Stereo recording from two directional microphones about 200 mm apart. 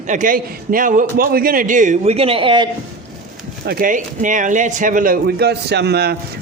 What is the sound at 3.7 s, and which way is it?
Speech, 45° right (ahead or behind).